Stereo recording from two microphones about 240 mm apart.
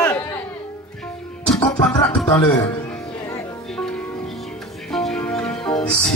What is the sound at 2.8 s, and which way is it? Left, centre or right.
Music, centre.